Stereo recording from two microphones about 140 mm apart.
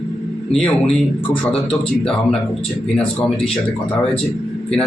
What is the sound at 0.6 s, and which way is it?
Speech, 45° left (ahead or behind).